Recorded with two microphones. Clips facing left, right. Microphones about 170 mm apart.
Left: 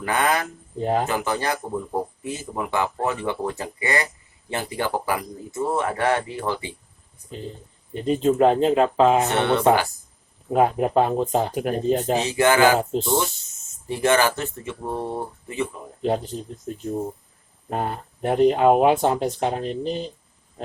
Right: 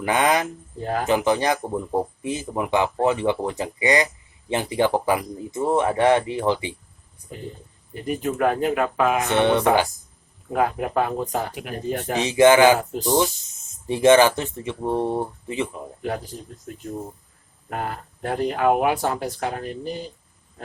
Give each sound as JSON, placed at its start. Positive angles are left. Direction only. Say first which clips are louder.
{"t": 0.0, "sound": "speech", "louder": "right 2 dB", "side_deg": -15}
{"t": 0.8, "sound": "speech", "louder": "left 4 dB", "side_deg": 20}
{"t": 1.0, "sound": "speech", "louder": "right 4 dB", "side_deg": -15}
{"t": 7.9, "sound": "speech", "louder": "left 6 dB", "side_deg": 25}
{"t": 9.3, "sound": "speech", "louder": "right 2 dB", "side_deg": -15}
{"t": 10.5, "sound": "speech", "louder": "left 4 dB", "side_deg": 20}
{"t": 12.2, "sound": "speech", "louder": "right 6 dB", "side_deg": -20}
{"t": 12.8, "sound": "speech", "louder": "left 1 dB", "side_deg": 25}
{"t": 13.8, "sound": "speech", "louder": "right 5 dB", "side_deg": -20}
{"t": 16.0, "sound": "speech", "louder": "left 6 dB", "side_deg": 25}